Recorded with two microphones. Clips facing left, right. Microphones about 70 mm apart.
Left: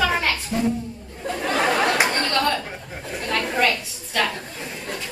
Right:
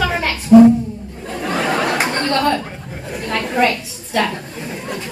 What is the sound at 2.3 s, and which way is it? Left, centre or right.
Chuckle, right.